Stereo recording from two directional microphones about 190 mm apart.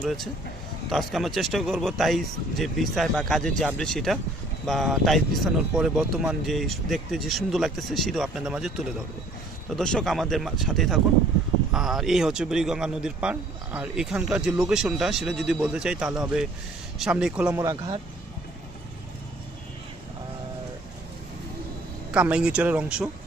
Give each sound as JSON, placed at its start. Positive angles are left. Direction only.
{"t": 0.0, "sound": "speech", "side_deg": 0}
{"t": 17.5, "sound": "speech", "side_deg": -20}
{"t": 22.1, "sound": "speech", "side_deg": -5}